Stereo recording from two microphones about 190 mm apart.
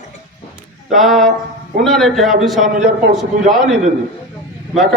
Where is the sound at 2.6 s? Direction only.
45° right (ahead or behind).